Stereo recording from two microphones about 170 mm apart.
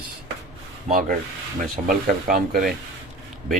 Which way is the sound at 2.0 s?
60° right (ahead or behind).